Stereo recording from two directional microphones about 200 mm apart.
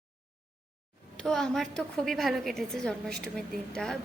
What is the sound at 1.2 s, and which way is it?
A woman's voice, centre (ahead or behind).